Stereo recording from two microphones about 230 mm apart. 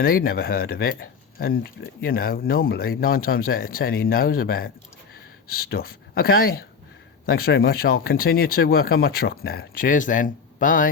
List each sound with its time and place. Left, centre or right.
0.0 s speech: left